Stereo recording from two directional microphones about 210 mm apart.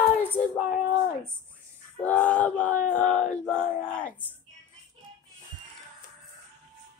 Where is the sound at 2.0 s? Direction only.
5° left (ahead or behind).